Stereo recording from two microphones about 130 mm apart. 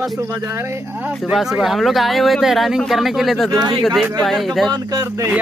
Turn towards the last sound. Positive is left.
turn(degrees=-30)  # may be behind; listen again after turning